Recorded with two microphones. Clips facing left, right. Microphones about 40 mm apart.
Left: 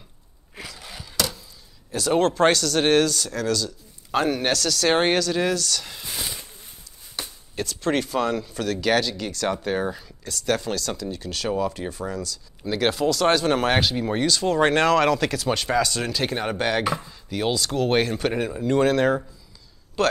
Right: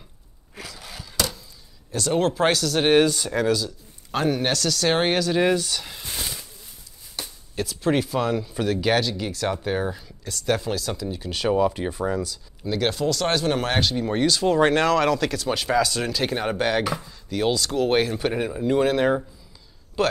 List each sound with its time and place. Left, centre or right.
0.6 s a sound: centre
1.9 s speech: centre
3.0 s speech: centre
4.1 s speech: centre
5.2 s speech: centre
5.9 s a sound: centre
7.5 s speech: centre
12.6 s speech: centre